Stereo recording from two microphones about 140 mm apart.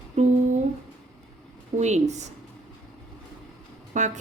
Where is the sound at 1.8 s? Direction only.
55° right (ahead or behind).